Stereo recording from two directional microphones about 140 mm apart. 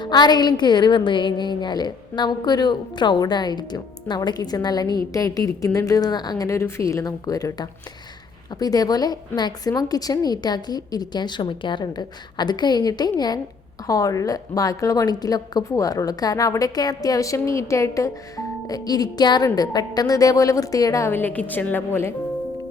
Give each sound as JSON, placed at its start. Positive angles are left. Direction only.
{"t": 0.0, "sound": "a woman's voice", "side_deg": 30}